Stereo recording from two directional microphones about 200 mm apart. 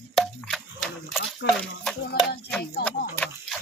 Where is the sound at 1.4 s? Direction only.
60° left (ahead or behind).